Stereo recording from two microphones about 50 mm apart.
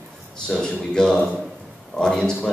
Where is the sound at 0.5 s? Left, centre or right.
Centre.